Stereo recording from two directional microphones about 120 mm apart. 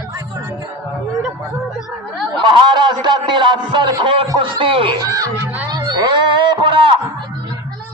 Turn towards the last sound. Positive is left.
turn(degrees=-45)  # may be behind; listen again after turning